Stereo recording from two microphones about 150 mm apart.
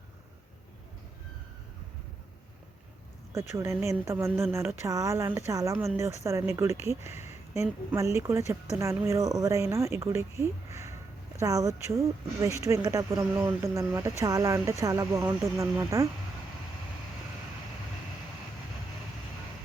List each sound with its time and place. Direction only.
3.5 s speech: 15° right (ahead or behind)